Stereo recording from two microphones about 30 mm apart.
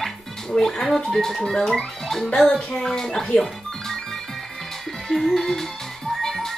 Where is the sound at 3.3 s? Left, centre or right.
Centre.